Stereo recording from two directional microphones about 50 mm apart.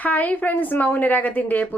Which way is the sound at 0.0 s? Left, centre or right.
Left.